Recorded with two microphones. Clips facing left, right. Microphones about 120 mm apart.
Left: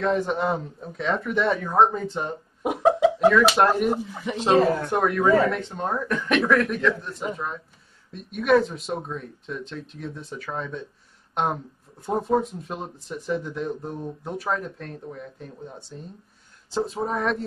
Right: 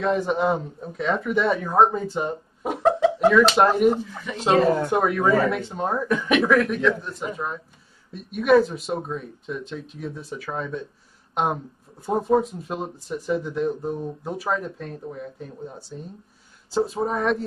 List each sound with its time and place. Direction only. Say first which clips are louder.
0.0 s speech: right 2 dB; centre (ahead or behind)
2.6 s a sound: left 1 dB; 10° left (ahead or behind)
3.5 s speech: right 3 dB; centre (ahead or behind)
4.0 s speech: left 3 dB; 20° left (ahead or behind)
4.8 s speech: even; 5° right (ahead or behind)